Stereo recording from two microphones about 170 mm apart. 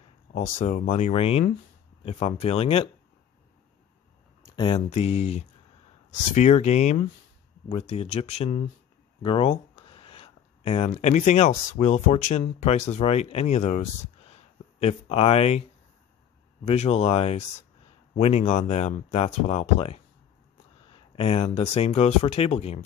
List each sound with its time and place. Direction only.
0.3 s speech: 45° left (ahead or behind)
4.5 s speech: 30° left (ahead or behind)
9.2 s a sound: 35° left (ahead or behind)
11.0 s speech: 45° left (ahead or behind)
16.6 s speech: 40° left (ahead or behind)